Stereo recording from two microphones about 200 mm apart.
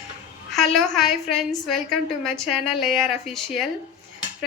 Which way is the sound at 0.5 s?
Centre (ahead or behind).